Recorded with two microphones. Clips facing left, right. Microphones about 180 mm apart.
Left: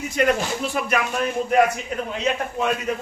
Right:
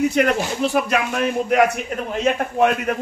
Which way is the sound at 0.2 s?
70° right (ahead or behind).